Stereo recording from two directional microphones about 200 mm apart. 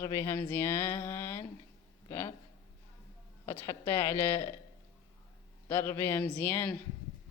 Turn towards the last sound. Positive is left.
turn(degrees=10)  # may be behind; listen again after turning